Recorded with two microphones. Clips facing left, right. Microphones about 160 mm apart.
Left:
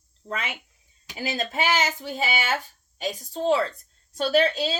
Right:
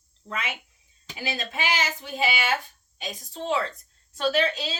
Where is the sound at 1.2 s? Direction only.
40° left (ahead or behind).